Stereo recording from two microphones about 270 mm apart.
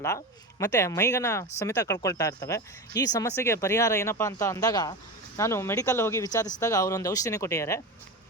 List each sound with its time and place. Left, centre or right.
0.6 s speech: centre